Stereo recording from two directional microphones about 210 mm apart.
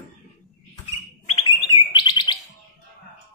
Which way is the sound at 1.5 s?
20° left (ahead or behind).